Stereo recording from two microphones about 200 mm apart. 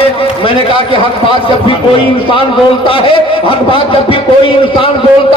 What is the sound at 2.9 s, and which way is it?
A man's voice, 25° left (ahead or behind).